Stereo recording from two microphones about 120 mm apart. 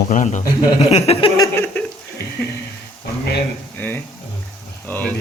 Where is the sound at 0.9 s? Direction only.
55° left (ahead or behind).